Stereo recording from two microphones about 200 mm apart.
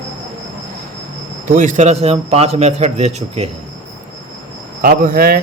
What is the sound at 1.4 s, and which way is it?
A man's voice, 40° right (ahead or behind).